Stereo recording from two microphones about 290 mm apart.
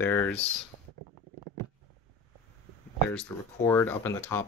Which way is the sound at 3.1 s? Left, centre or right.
Centre.